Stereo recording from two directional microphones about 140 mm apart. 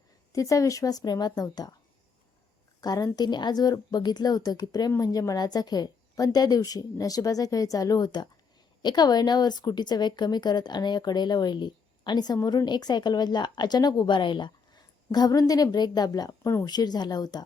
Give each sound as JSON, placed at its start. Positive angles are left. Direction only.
{"t": 0.3, "sound": "a woman's voice", "side_deg": 25}
{"t": 2.8, "sound": "a woman's voice", "side_deg": 25}